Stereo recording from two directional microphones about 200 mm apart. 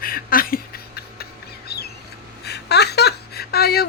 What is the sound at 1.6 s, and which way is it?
Squawk, 55° left (ahead or behind).